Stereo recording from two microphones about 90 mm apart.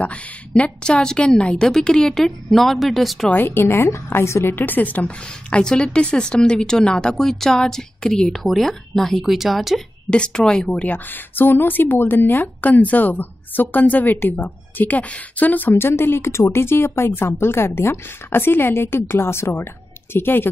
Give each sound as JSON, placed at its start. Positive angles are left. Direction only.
{"t": 0.6, "sound": "a woman's voice", "side_deg": 10}
{"t": 3.3, "sound": "a woman's voice", "side_deg": 20}
{"t": 10.0, "sound": "a woman's voice", "side_deg": 10}
{"t": 11.3, "sound": "speech", "side_deg": 20}